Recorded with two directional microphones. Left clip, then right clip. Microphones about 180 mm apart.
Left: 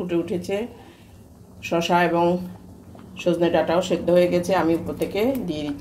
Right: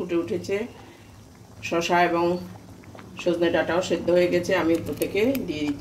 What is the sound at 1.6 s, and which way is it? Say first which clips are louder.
Speech: left 1 dB; 10° left (ahead or behind).